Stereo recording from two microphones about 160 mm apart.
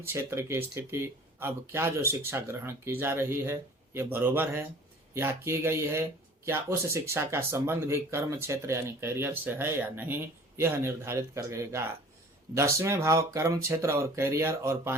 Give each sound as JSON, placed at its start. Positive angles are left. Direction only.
{"t": 0.0, "sound": "speech", "side_deg": -15}